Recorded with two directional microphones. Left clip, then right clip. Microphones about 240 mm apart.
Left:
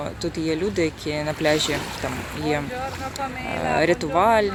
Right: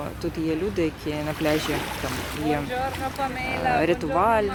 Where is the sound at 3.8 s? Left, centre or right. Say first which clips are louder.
Left 6 dB; centre.